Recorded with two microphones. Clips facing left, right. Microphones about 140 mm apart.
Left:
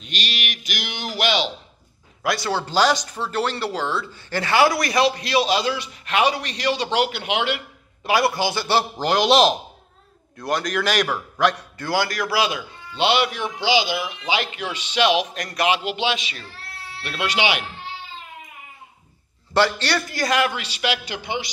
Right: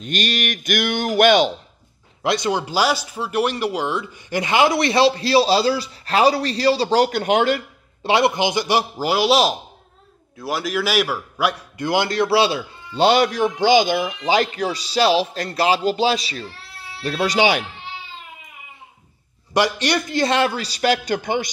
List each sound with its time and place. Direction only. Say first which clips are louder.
0.0 s speech: right 8 dB; 50° right (ahead or behind)
2.2 s speech: right 3 dB; 20° right (ahead or behind); by 7.6 s 45° right (ahead or behind)
8.0 s a man's voice: right 3 dB; 25° right (ahead or behind)
11.9 s a man's voice: right 4 dB; 25° right (ahead or behind); by 17.6 s 40° right (ahead or behind)
19.5 s a man's voice: right 1 dB; 15° right (ahead or behind); by 21.5 s 45° right (ahead or behind)